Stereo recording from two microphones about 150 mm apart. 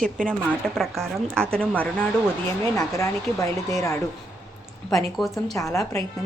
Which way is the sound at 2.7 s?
20° left (ahead or behind).